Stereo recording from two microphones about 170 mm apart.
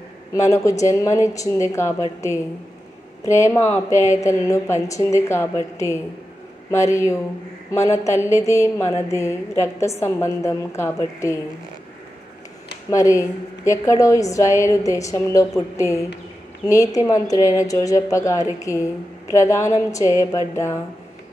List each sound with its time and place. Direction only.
0.3 s a woman's voice: 20° left (ahead or behind)
12.9 s a woman's voice: 20° left (ahead or behind)